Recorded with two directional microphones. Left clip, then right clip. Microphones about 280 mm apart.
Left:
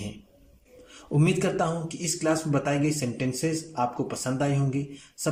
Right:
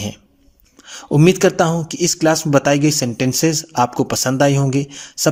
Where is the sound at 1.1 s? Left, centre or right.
Right.